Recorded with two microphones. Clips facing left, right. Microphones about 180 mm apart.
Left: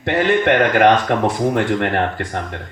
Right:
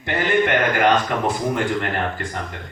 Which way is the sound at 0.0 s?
65° left (ahead or behind).